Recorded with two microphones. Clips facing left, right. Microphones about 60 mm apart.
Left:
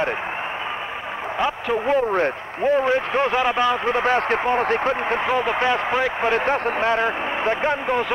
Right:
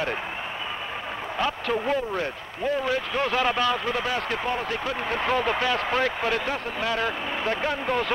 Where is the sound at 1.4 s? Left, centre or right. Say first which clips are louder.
Left 3 dB; left.